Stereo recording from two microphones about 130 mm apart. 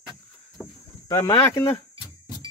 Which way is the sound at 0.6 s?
25° left (ahead or behind).